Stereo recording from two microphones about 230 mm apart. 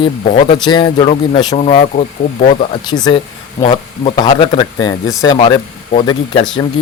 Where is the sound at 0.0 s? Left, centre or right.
Left.